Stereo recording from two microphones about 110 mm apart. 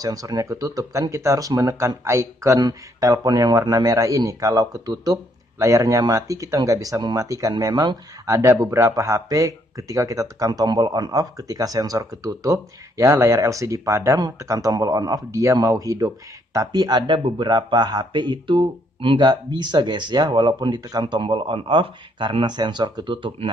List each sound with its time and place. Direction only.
0.0 s speech: 35° right (ahead or behind); by 23.5 s 50° right (ahead or behind)